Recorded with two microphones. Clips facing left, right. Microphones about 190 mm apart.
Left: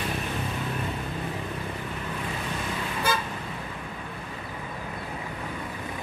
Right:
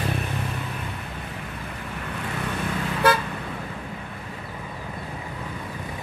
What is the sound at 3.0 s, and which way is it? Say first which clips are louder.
Vehicle: right 8 dB; 65° right (ahead or behind).